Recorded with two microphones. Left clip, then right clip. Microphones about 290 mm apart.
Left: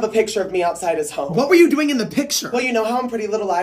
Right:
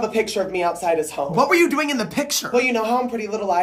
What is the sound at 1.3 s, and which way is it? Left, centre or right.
Speech, centre.